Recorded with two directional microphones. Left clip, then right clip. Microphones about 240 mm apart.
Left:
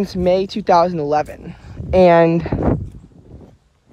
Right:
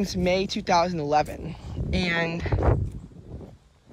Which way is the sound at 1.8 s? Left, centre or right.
Centre.